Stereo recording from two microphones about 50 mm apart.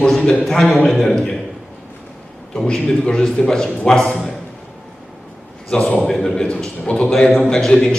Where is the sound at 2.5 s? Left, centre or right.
Centre.